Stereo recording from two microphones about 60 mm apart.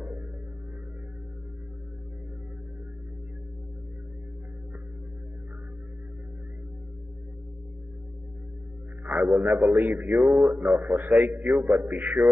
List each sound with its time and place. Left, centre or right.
9.0 s a man's voice: centre